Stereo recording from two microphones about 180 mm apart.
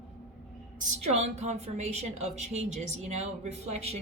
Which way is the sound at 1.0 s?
40° right (ahead or behind).